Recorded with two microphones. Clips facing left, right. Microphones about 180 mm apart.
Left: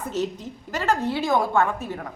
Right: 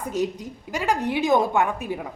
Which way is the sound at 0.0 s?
10° right (ahead or behind).